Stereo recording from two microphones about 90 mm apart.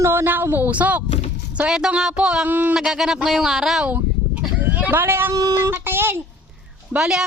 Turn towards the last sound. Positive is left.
turn(degrees=-5)  # may be behind; listen again after turning